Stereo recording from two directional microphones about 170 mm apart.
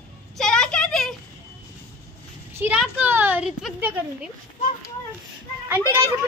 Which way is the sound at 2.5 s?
10° right (ahead or behind).